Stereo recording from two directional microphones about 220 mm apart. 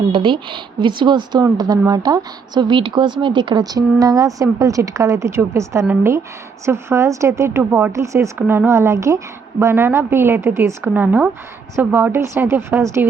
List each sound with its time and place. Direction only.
0.1 s a woman's voice: 20° right (ahead or behind)